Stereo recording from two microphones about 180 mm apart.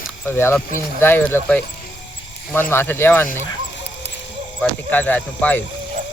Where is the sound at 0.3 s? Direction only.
10° left (ahead or behind).